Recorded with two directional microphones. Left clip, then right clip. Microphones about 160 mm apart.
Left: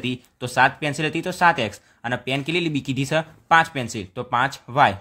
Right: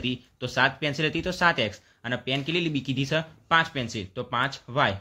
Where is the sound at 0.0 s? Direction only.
35° left (ahead or behind).